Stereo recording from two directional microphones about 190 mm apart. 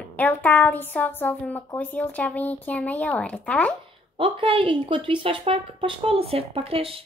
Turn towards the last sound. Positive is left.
turn(degrees=-30)  # may be behind; listen again after turning